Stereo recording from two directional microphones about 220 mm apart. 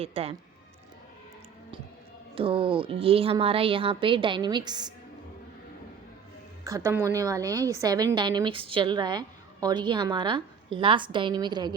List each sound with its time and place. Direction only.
0.0 s a woman's voice: 25° right (ahead or behind)
2.3 s a woman's voice: 25° right (ahead or behind)
6.7 s a woman's voice: 15° right (ahead or behind)